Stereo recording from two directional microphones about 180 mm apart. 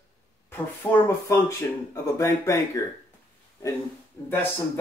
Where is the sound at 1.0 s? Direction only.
15° left (ahead or behind).